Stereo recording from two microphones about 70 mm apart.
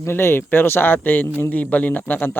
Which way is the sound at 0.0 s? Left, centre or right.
Left.